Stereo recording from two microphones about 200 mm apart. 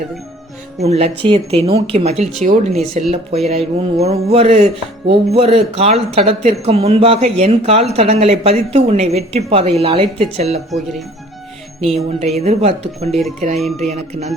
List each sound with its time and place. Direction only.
0.8 s speech: 30° right (ahead or behind)
11.9 s speech: 30° right (ahead or behind)
13.1 s speech: centre (ahead or behind)
13.9 s speech: 35° right (ahead or behind)